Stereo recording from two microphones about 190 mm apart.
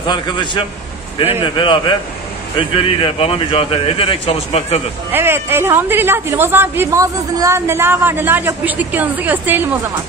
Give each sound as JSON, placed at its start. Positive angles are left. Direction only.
{"t": 0.0, "sound": "speech", "side_deg": 25}
{"t": 5.1, "sound": "a woman's voice", "side_deg": -10}